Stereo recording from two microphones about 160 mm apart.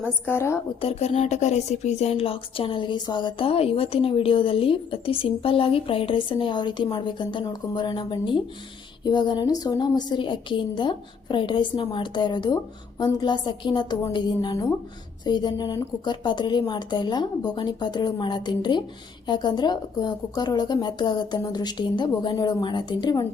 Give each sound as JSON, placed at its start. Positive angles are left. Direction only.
{"t": 0.3, "sound": "a woman's voice", "side_deg": 15}
{"t": 0.8, "sound": "a woman's voice", "side_deg": 40}